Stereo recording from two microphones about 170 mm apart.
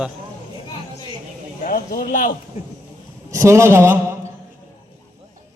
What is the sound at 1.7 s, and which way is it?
Speech, 60° left (ahead or behind).